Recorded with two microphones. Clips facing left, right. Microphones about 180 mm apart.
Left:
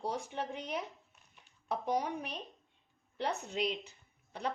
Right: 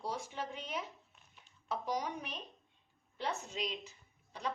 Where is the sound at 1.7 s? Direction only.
55° left (ahead or behind).